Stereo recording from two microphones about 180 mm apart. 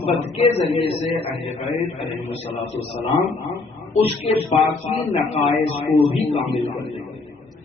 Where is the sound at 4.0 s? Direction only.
30° left (ahead or behind).